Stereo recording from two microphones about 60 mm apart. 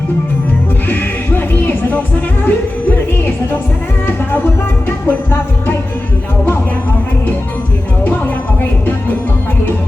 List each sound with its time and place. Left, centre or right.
1.4 s music: left
5.0 s music: left